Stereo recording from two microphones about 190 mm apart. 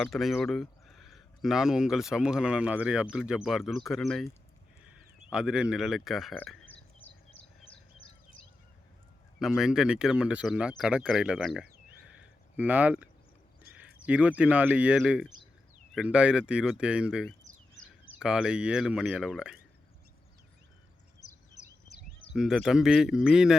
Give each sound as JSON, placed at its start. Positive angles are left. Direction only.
{"t": 0.0, "sound": "speech", "side_deg": 0}
{"t": 9.4, "sound": "speech", "side_deg": -5}
{"t": 21.6, "sound": "a sound", "side_deg": 35}
{"t": 22.4, "sound": "speech", "side_deg": 0}